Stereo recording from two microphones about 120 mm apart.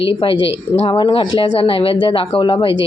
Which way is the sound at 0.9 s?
45° left (ahead or behind).